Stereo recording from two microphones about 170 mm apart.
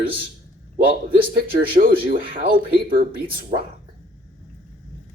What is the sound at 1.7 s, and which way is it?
Speech, 60° right (ahead or behind).